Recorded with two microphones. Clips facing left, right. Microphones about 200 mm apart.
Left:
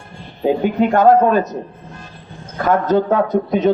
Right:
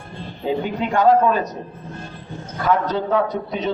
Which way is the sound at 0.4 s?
50° left (ahead or behind).